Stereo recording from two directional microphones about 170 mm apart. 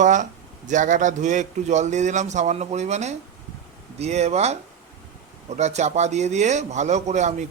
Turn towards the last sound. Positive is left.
turn(degrees=-45)  # may be behind; listen again after turning